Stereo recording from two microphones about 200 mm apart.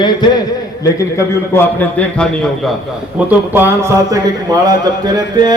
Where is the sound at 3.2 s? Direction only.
10° right (ahead or behind).